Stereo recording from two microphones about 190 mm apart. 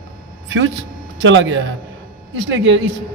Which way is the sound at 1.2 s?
90° right.